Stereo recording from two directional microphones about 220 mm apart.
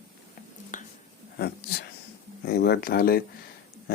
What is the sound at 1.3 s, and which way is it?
Speech, 45° left (ahead or behind).